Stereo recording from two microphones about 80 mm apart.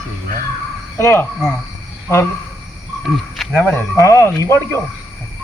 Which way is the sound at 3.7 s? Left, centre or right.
Left.